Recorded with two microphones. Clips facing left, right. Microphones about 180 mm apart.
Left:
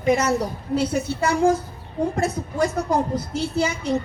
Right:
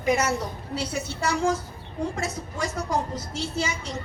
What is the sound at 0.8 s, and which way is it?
A woman's voice, 55° left (ahead or behind).